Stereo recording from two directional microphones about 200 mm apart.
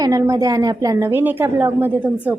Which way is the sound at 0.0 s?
15° right (ahead or behind).